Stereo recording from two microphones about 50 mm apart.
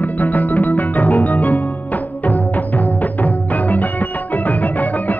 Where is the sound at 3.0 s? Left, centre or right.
Left.